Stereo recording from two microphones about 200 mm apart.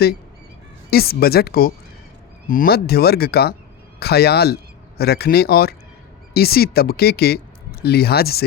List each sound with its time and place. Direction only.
0.9 s a man's voice: 50° left (ahead or behind)